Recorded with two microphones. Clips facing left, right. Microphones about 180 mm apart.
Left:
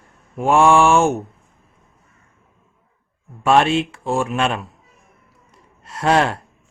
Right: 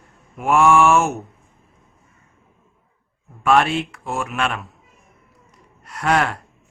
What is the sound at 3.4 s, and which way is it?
Speech, 25° left (ahead or behind).